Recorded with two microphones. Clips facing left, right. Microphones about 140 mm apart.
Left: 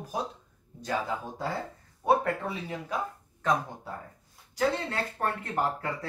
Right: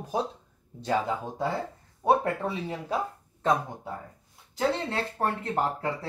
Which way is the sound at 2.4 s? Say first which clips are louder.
Right 3 dB; 30° right (ahead or behind).